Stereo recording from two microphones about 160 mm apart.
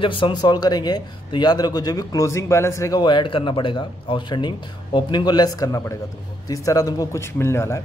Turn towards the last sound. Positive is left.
turn(degrees=15)  # may be behind; listen again after turning